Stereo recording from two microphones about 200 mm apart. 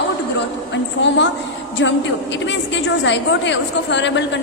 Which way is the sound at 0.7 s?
65° left (ahead or behind).